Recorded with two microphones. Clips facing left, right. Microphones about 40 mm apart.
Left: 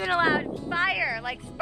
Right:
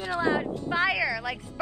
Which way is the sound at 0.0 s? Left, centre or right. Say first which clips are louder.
Left 4 dB; left.